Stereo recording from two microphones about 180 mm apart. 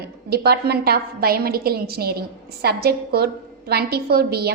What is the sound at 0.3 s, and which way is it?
A woman's voice, 60° right (ahead or behind).